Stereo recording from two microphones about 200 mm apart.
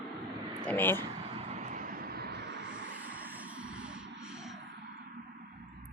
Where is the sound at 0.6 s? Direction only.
10° left (ahead or behind).